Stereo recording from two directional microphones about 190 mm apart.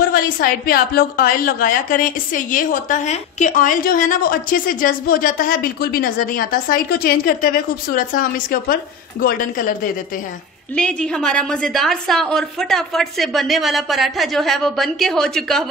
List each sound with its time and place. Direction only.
0.0 s a woman's voice: 50° left (ahead or behind)
10.8 s a woman's voice: 5° left (ahead or behind)